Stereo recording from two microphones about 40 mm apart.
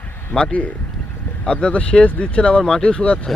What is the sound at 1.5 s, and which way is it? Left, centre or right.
Speech, left.